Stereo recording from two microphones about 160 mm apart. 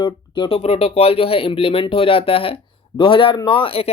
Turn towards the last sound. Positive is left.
turn(degrees=35)  # may be behind; listen again after turning